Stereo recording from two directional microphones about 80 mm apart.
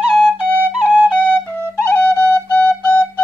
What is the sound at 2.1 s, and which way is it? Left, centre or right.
Flute, right.